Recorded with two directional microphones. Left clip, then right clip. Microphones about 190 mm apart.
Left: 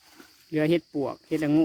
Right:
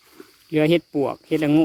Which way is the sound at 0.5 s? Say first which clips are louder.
Right 6 dB; 20° right (ahead or behind).